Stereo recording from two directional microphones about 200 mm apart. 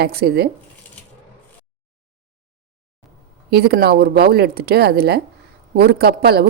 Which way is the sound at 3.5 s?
50° right (ahead or behind).